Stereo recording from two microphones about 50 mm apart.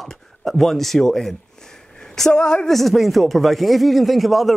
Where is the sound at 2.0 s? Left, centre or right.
Centre.